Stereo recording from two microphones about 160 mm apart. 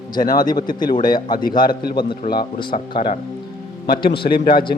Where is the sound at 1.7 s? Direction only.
75° left (ahead or behind).